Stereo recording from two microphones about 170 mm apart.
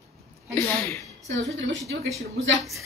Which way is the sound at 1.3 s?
90° right.